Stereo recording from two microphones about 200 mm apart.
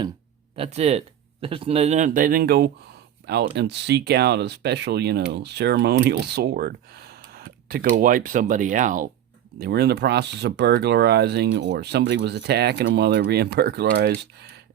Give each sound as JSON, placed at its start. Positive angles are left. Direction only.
{"t": 0.5, "sound": "speech", "side_deg": -30}
{"t": 9.6, "sound": "speech", "side_deg": -55}